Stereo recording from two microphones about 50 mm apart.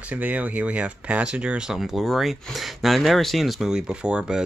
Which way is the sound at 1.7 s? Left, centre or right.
Centre.